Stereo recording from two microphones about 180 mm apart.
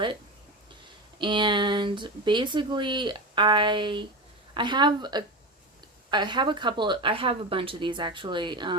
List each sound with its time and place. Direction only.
1.2 s speech: 25° right (ahead or behind)